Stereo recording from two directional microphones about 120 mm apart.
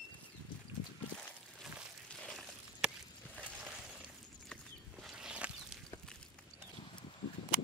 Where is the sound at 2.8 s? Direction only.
5° right (ahead or behind).